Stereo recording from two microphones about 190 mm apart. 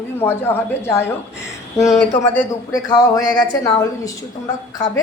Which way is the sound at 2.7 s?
20° left (ahead or behind).